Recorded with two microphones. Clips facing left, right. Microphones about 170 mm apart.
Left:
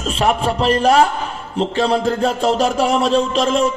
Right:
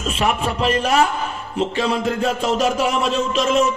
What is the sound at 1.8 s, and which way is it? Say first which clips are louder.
A man's voice: left 5 dB; 30° left (ahead or behind).